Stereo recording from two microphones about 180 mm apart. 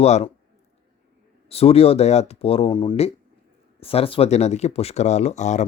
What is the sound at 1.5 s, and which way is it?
Speech, 35° left (ahead or behind).